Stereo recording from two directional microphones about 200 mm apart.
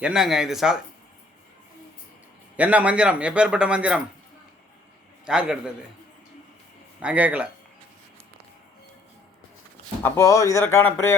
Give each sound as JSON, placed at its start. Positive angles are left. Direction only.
{"t": 0.0, "sound": "a man's voice", "side_deg": -5}
{"t": 2.6, "sound": "a man's voice", "side_deg": -5}
{"t": 5.2, "sound": "a man's voice", "side_deg": -5}
{"t": 7.0, "sound": "speech", "side_deg": -5}
{"t": 10.0, "sound": "speech", "side_deg": 15}